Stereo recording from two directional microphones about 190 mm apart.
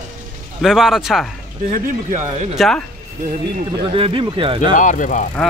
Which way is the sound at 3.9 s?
30° right (ahead or behind).